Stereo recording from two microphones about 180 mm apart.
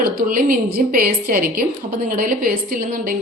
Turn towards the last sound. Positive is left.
turn(degrees=-50)  # may be behind; listen again after turning